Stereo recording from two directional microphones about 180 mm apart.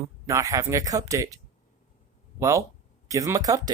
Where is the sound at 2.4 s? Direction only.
15° right (ahead or behind).